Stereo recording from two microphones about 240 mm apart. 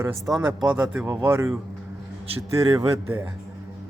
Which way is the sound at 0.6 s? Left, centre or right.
Centre.